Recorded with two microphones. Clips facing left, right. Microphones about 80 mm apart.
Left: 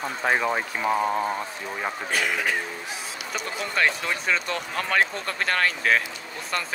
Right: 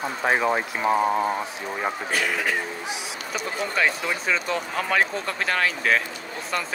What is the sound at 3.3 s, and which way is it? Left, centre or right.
Speech, centre.